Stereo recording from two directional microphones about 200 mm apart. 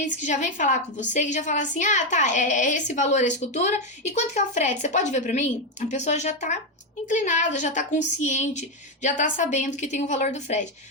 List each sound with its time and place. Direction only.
0.0 s a woman's voice: 40° left (ahead or behind)